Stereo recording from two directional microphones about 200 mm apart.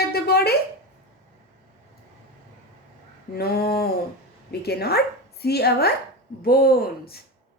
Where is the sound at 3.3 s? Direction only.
50° left (ahead or behind).